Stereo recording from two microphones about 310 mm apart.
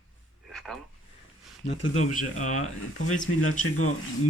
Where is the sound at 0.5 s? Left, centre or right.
Centre.